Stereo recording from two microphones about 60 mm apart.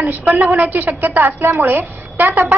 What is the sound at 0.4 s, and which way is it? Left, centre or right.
A woman's voice, right.